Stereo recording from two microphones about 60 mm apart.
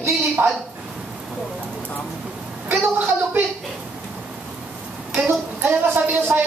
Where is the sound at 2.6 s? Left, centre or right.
Right.